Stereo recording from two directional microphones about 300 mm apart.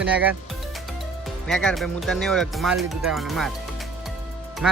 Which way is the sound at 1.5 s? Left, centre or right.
Centre.